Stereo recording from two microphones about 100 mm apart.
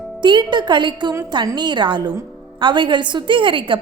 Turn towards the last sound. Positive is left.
turn(degrees=-55)  # may be behind; listen again after turning